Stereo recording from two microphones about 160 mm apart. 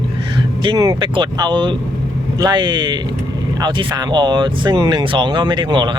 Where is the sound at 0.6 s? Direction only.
25° right (ahead or behind).